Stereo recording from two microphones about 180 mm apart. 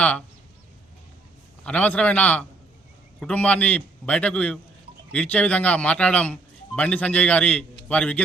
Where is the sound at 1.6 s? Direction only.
5° left (ahead or behind).